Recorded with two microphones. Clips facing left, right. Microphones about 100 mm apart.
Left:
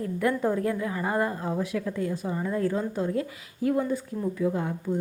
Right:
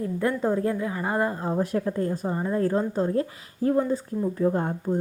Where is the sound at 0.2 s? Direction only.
25° right (ahead or behind).